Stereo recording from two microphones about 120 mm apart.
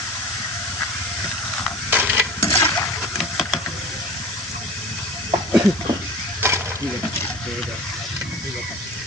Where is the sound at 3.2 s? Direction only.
Centre (ahead or behind).